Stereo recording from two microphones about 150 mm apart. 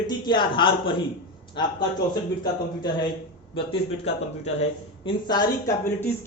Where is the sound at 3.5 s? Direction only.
35° left (ahead or behind).